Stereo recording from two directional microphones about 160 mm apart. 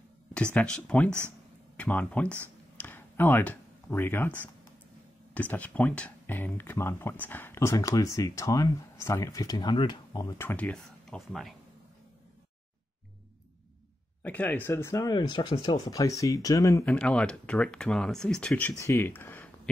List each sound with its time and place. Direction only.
0.3 s speech: 5° left (ahead or behind)
2.8 s a sound: 10° left (ahead or behind)
5.3 s speech: 10° left (ahead or behind)
14.2 s speech: 10° left (ahead or behind)
18.8 s speech: 20° left (ahead or behind)